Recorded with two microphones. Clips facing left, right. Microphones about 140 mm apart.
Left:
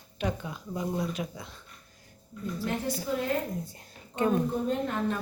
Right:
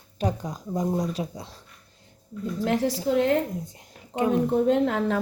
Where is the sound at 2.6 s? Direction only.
90° right.